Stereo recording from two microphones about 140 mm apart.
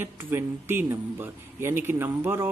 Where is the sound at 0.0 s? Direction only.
15° right (ahead or behind).